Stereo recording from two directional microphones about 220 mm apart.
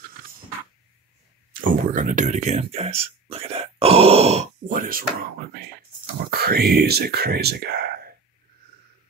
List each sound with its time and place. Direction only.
1.7 s speech: 35° right (ahead or behind)
6.3 s speech: 45° right (ahead or behind)